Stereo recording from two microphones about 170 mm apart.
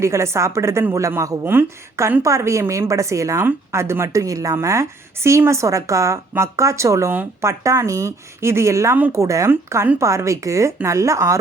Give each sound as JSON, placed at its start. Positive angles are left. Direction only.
{"t": 0.0, "sound": "a woman's voice", "side_deg": -15}